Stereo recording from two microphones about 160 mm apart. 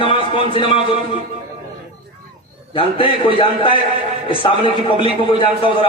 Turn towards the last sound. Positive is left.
turn(degrees=30)  # may be behind; listen again after turning